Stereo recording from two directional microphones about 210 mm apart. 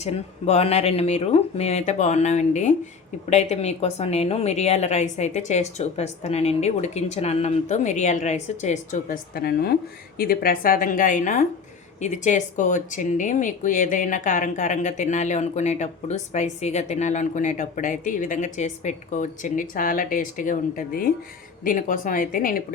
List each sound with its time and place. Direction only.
0.0 s speech: 30° left (ahead or behind)